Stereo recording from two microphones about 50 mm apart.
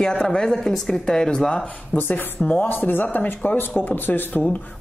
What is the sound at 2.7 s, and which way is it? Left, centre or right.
Speech, left.